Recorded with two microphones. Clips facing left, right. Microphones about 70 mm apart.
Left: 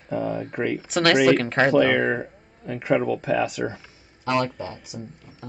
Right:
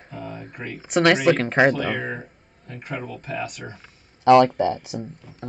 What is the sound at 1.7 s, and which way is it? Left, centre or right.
Speech, left.